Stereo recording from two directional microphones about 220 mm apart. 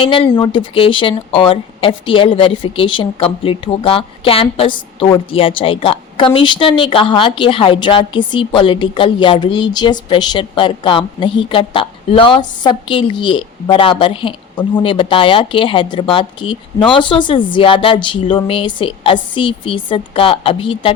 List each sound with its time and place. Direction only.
0.0 s a woman's voice: 25° left (ahead or behind)